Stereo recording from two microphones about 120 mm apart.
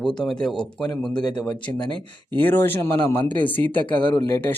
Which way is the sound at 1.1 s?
35° left (ahead or behind).